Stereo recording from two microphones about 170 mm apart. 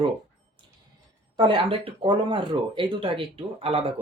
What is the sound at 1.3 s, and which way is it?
Speech, 30° right (ahead or behind).